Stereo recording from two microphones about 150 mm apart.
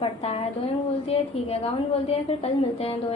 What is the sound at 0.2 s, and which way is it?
A woman's voice, 40° left (ahead or behind).